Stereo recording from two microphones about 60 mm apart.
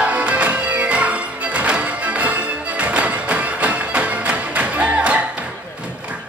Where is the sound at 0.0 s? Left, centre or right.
Right.